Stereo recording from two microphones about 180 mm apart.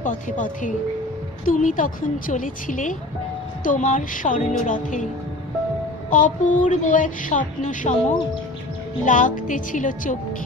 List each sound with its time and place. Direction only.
0.0 s speech: 45° left (ahead or behind)
6.0 s speech: 45° left (ahead or behind)